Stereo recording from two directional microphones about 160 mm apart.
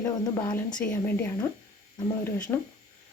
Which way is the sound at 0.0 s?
25° left (ahead or behind).